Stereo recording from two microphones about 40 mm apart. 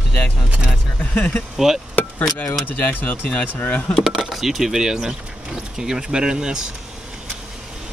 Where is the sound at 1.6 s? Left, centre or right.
Centre.